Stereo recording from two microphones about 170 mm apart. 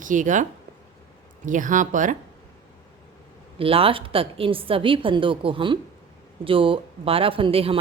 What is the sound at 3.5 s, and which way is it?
A woman's voice, 35° right (ahead or behind).